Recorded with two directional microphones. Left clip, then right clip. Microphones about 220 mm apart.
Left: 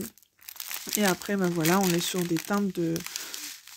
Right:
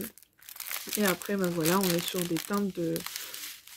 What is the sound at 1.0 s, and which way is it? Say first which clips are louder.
Speech: left 2 dB; 50° left (ahead or behind).